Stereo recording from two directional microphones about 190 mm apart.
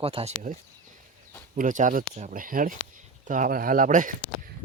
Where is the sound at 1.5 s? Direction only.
45° right (ahead or behind).